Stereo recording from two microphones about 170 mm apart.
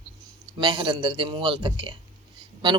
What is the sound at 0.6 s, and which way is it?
Speech, 30° right (ahead or behind).